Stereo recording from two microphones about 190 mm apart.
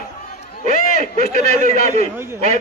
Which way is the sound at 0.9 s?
40° right (ahead or behind).